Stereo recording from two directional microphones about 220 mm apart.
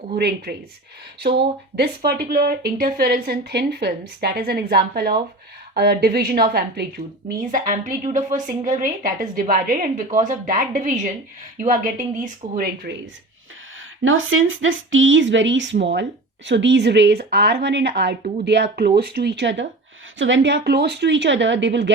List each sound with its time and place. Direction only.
0.1 s speech: 45° right (ahead or behind)
1.7 s a woman's voice: 45° right (ahead or behind)
14.0 s a woman's voice: 65° right (ahead or behind)